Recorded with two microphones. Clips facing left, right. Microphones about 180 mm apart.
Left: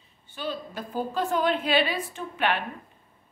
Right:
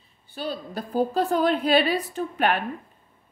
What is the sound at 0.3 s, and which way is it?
A woman's voice, 35° right (ahead or behind).